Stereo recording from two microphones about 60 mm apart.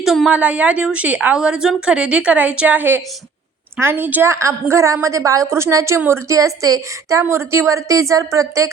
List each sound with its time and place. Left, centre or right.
0.3 s speech: right
1.4 s a woman's voice: centre; by 4.3 s right
4.3 s speech: right
5.5 s a woman's voice: right